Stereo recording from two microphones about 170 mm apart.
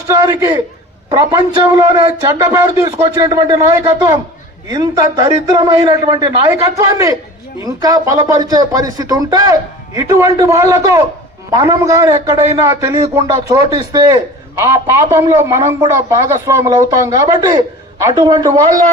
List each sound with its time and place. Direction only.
0.1 s a man's voice: 20° right (ahead or behind)